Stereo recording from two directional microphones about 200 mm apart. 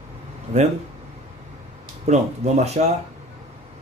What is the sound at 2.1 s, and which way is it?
Speech, 30° right (ahead or behind).